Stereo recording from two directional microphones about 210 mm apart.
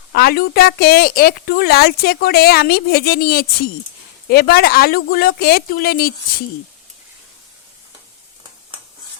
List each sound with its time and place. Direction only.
0.1 s a woman's voice: 45° left (ahead or behind)